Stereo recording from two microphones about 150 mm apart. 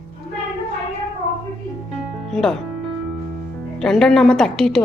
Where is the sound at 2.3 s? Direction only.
5° left (ahead or behind).